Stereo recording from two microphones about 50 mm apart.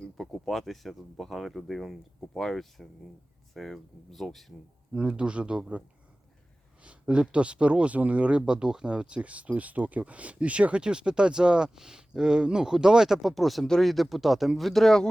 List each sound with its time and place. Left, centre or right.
0.2 s speech: centre
4.9 s speech: right
7.1 s speech: right; by 15.0 s centre